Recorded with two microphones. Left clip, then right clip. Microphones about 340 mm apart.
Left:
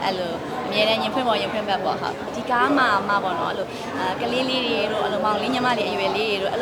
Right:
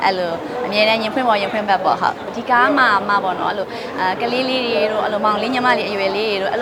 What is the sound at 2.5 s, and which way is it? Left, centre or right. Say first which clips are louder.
Speech: right 6 dB; centre.